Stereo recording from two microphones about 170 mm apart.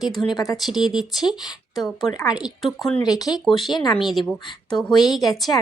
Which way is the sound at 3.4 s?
Centre (ahead or behind).